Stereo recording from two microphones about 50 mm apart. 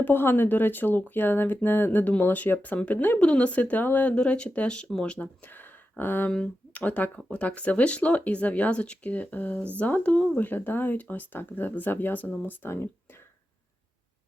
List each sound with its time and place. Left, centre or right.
0.0 s speech: left
3.2 s speech: left
4.1 s speech: centre
5.4 s a sound: left
6.7 s speech: left
12.6 s speech: left